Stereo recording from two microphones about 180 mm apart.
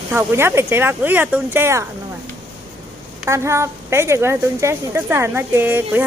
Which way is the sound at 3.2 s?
15° right (ahead or behind).